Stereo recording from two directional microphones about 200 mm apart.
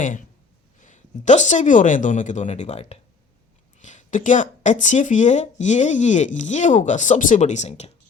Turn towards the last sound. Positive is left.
turn(degrees=35)  # may be behind; listen again after turning